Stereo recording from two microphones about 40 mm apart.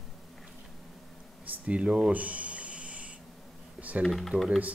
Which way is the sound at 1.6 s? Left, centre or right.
Right.